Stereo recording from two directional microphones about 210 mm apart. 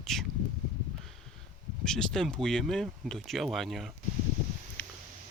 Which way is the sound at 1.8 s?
5° left (ahead or behind).